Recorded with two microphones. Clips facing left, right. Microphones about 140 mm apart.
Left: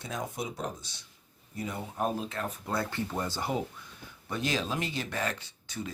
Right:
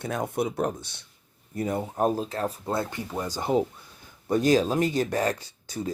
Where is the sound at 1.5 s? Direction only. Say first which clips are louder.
Right 7 dB; 50° right (ahead or behind); by 2.8 s 30° right (ahead or behind).